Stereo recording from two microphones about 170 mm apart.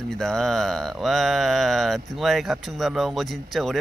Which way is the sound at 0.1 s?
5° left (ahead or behind).